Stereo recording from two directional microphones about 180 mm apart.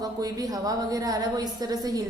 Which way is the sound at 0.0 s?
20° right (ahead or behind).